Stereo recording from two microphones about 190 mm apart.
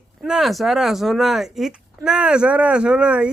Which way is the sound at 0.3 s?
Centre (ahead or behind).